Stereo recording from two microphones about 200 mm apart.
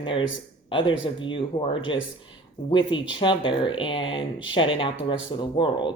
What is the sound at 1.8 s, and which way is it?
Speech, 70° left (ahead or behind).